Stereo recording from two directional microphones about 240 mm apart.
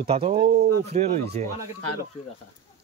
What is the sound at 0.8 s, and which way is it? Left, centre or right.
Speech, right.